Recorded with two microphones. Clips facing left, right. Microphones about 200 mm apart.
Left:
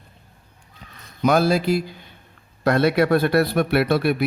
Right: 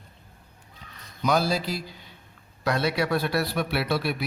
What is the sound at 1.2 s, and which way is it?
Speech, 55° left (ahead or behind).